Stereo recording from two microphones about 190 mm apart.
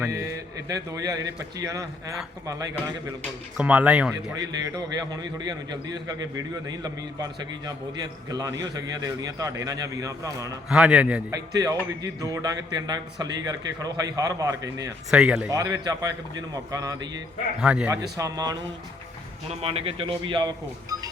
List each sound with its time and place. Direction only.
0.7 s a man's voice: 20° right (ahead or behind)
3.6 s speech: 10° right (ahead or behind)
4.4 s a man's voice: 20° right (ahead or behind)
10.7 s a man's voice: 5° right (ahead or behind)
11.5 s a man's voice: 20° right (ahead or behind)
15.1 s a man's voice: 5° right (ahead or behind)
15.4 s a man's voice: 15° right (ahead or behind)
17.6 s speech: 5° right (ahead or behind)
18.2 s a man's voice: 20° right (ahead or behind)
19.6 s a man's voice: 30° right (ahead or behind)